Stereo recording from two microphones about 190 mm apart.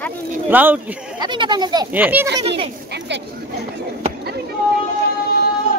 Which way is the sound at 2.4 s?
30° right (ahead or behind).